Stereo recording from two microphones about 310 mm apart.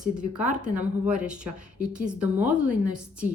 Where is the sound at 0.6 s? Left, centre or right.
Centre.